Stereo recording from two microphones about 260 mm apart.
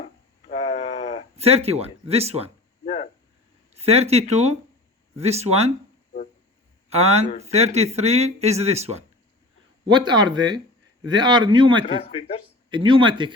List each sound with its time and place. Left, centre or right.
0.0 s a sound: left
1.4 s speech: right
2.8 s a sound: left
3.8 s speech: right
6.9 s speech: right
12.0 s speech: left
12.7 s speech: centre